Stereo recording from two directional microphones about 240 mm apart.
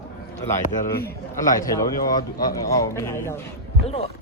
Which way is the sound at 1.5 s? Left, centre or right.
Centre.